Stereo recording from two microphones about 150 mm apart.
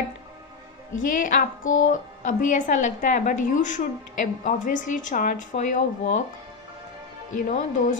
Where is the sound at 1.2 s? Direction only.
60° left (ahead or behind).